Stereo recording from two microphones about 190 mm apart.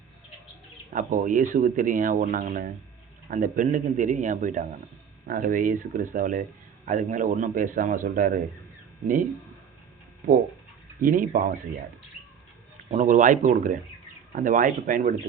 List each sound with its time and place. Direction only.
0.9 s speech: 45° right (ahead or behind)
11.0 s speech: 45° right (ahead or behind)
12.9 s speech: 40° right (ahead or behind)